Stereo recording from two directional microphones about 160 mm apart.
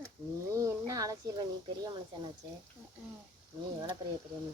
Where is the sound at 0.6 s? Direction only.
20° right (ahead or behind).